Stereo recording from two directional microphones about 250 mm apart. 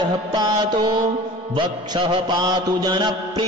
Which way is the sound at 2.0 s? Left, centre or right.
Right.